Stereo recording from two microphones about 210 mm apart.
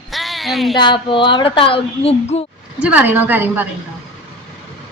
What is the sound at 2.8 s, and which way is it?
Speech, 5° right (ahead or behind).